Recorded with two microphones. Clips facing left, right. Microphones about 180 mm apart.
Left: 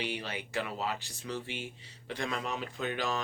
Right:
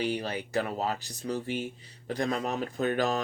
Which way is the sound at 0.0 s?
40° right (ahead or behind).